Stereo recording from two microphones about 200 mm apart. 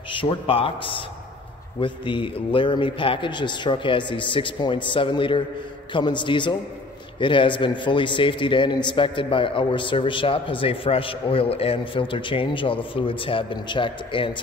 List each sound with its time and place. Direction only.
0.1 s a man's voice: 25° left (ahead or behind)